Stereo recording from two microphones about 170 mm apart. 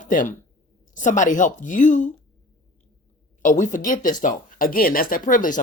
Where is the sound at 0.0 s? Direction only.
50° left (ahead or behind).